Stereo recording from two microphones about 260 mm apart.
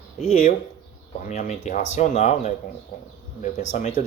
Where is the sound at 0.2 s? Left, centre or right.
Left.